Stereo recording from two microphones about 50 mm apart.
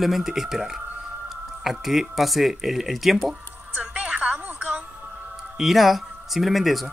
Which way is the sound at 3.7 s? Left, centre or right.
Right.